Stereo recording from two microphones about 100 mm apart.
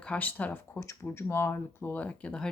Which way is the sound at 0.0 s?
15° left (ahead or behind).